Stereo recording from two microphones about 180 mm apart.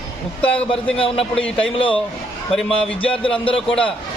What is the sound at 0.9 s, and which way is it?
Speech, 30° left (ahead or behind).